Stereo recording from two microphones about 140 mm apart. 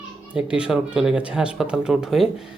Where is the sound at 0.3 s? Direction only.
5° right (ahead or behind).